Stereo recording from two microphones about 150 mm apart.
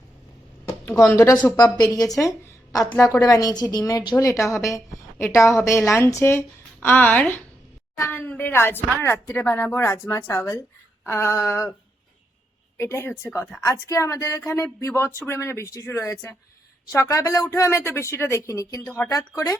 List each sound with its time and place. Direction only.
1.0 s a woman's voice: 20° left (ahead or behind)
12.7 s a woman's voice: 20° left (ahead or behind)